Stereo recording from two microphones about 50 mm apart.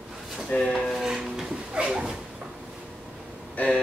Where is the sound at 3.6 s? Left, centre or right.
Left.